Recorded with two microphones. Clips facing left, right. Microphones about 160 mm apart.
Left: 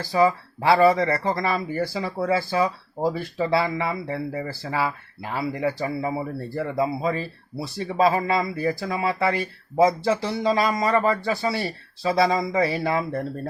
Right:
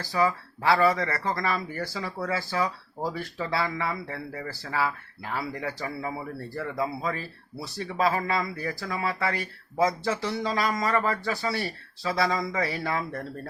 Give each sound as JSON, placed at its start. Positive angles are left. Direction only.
{"t": 0.1, "sound": "speech", "side_deg": 20}
{"t": 0.9, "sound": "speech", "side_deg": 30}
{"t": 1.4, "sound": "speech", "side_deg": 15}